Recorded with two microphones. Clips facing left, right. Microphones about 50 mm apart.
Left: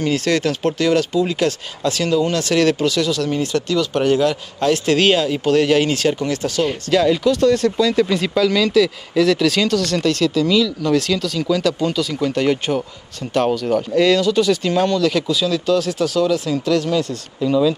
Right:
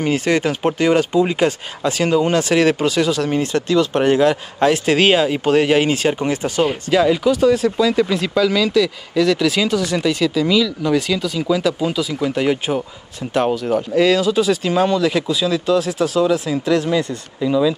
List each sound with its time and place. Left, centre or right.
0.0 s speech: centre
6.7 s speech: centre
17.5 s speech: centre